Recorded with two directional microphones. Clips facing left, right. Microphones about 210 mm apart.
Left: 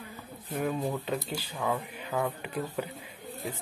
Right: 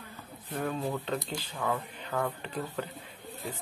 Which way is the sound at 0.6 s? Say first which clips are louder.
Left 2 dB; 15° left (ahead or behind).